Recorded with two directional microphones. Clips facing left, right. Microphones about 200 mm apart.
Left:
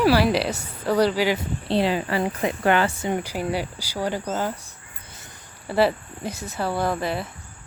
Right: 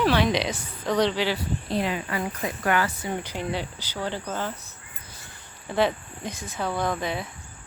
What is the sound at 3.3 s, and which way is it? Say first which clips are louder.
Speech: left 4 dB; 10° left (ahead or behind).